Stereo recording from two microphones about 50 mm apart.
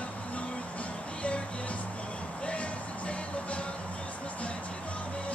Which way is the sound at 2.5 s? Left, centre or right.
Left.